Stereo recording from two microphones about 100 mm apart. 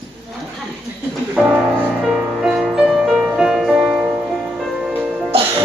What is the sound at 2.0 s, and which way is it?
Music, 5° right (ahead or behind).